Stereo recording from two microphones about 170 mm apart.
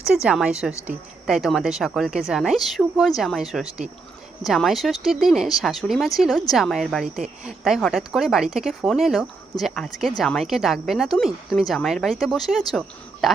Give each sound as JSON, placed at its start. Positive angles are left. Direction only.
{"t": 0.1, "sound": "speech", "side_deg": -5}